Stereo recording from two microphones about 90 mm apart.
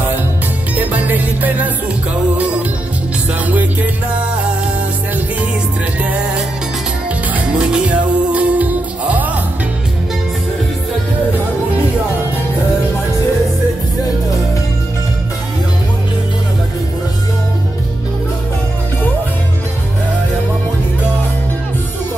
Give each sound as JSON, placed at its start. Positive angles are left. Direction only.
{"t": 0.7, "sound": "music", "side_deg": -20}
{"t": 3.4, "sound": "music", "side_deg": -15}
{"t": 5.9, "sound": "music", "side_deg": -15}